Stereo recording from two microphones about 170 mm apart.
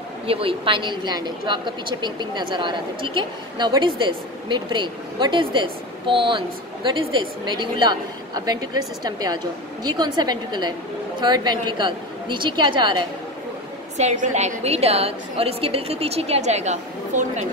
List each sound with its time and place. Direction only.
0.3 s a woman's voice: 35° right (ahead or behind)
13.9 s a woman's voice: 45° right (ahead or behind)